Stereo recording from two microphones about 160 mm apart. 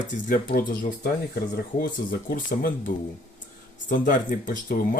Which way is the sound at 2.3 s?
60° left (ahead or behind).